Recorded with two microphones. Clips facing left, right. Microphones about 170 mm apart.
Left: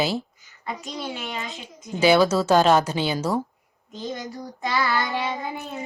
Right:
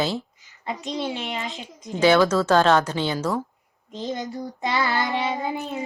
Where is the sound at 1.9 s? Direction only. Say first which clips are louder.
Even; 10° left (ahead or behind).